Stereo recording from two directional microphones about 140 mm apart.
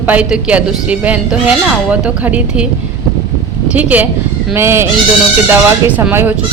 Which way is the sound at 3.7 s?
10° right (ahead or behind).